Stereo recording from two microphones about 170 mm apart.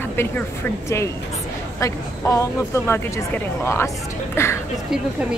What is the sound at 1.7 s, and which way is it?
Speech, 15° left (ahead or behind).